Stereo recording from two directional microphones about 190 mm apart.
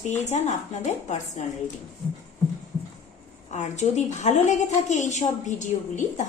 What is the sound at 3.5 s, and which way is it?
A woman's voice, 40° left (ahead or behind).